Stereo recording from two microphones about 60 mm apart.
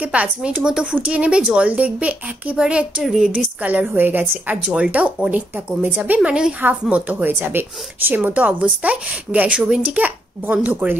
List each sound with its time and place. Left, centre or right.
0.0 s a woman's voice: right
3.0 s speech: centre
3.3 s a woman's voice: right
3.9 s a woman's voice: right; by 5.8 s centre
5.8 s a woman's voice: right
8.3 s a woman's voice: right
9.8 s a woman's voice: right